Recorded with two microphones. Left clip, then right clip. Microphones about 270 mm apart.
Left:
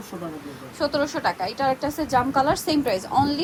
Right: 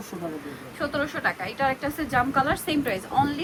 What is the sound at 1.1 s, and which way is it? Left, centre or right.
Speech, centre.